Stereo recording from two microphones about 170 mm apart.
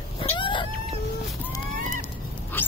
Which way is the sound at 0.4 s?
30° left (ahead or behind).